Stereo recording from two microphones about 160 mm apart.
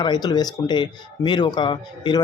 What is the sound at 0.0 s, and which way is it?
A man's voice, 25° left (ahead or behind).